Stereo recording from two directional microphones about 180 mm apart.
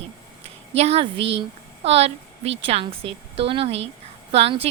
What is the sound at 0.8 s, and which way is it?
Speech, 35° right (ahead or behind).